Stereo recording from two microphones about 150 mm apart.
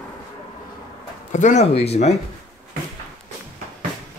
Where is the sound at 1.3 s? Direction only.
55° left (ahead or behind).